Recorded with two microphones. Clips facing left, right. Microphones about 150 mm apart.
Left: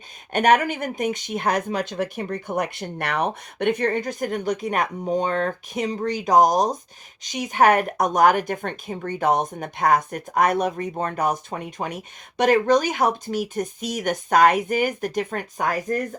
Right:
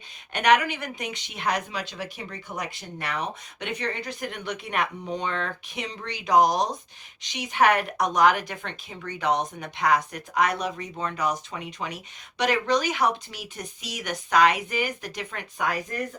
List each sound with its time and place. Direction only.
0.3 s speech: 45° left (ahead or behind)